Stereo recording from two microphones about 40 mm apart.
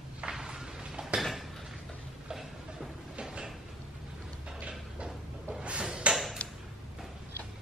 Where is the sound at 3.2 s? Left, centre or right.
Right.